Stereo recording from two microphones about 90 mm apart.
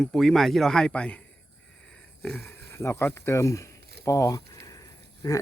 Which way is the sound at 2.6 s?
30° left (ahead or behind).